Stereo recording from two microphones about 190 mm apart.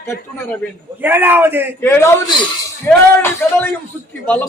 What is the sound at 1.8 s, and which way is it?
A man's voice, 10° left (ahead or behind).